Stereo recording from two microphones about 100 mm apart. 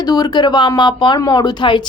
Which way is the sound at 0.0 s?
40° left (ahead or behind).